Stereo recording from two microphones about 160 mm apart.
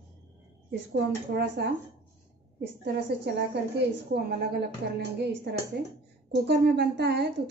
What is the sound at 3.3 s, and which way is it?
A woman's voice, 90° right.